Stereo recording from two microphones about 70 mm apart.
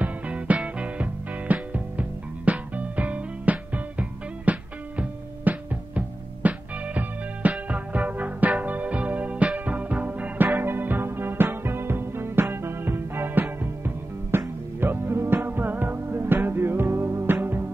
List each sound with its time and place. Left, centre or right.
0.0 s music: centre